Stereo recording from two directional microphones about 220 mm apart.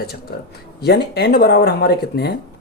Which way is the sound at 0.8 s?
45° left (ahead or behind).